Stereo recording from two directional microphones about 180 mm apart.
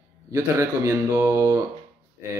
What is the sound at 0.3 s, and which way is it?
Speech, 15° right (ahead or behind).